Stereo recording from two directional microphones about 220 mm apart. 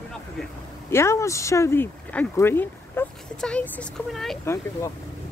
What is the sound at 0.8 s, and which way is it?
Speech, 10° left (ahead or behind).